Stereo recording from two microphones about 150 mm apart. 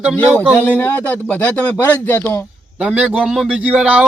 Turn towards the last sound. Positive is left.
turn(degrees=-5)  # may be behind; listen again after turning